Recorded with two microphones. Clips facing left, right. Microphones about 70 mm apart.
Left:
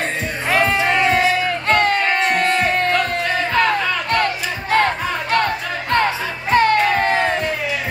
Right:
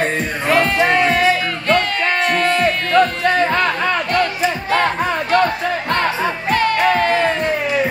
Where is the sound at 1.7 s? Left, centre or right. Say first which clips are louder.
Even; left.